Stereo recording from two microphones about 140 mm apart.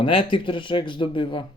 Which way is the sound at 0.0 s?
40° left (ahead or behind).